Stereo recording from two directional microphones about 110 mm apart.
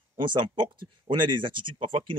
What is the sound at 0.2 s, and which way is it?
Speech, 50° right (ahead or behind).